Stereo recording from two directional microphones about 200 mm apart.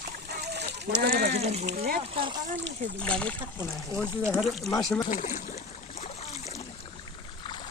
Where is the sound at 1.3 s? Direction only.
30° right (ahead or behind).